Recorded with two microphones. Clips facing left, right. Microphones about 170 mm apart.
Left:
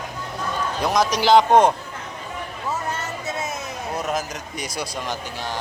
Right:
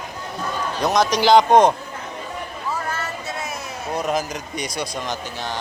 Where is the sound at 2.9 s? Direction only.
20° left (ahead or behind).